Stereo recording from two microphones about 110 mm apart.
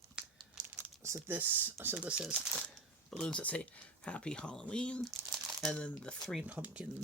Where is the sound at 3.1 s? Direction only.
10° left (ahead or behind).